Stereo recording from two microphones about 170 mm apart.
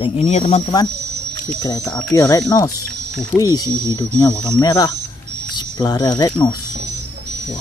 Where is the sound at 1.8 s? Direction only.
5° left (ahead or behind).